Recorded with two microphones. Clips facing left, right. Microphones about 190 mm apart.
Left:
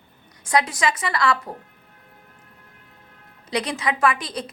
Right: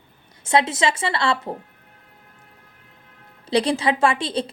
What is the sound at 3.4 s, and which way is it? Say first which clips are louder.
A woman's voice: right 5 dB; 30° right (ahead or behind).